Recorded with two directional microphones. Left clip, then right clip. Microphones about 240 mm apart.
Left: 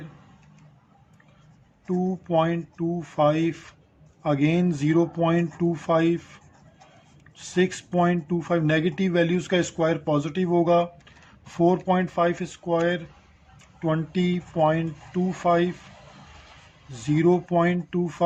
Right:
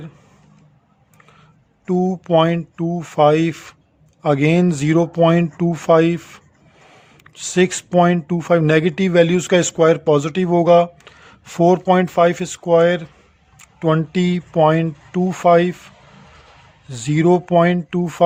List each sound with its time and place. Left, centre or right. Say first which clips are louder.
1.9 s speech: right 9 dB; right
16.9 s speech: right 6 dB; right